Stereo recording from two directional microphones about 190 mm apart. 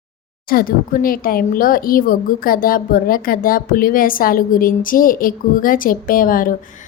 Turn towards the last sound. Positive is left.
turn(degrees=45)  # may be behind; listen again after turning